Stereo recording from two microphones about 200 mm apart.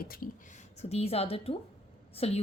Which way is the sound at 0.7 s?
30° left (ahead or behind).